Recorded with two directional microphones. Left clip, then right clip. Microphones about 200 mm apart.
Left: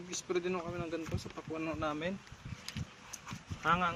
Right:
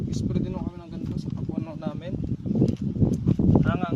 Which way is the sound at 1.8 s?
60° right (ahead or behind).